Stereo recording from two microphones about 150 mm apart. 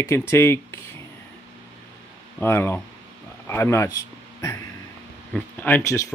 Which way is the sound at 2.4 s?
15° left (ahead or behind).